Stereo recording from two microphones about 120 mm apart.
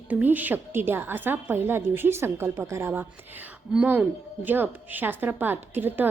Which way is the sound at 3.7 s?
10° right (ahead or behind).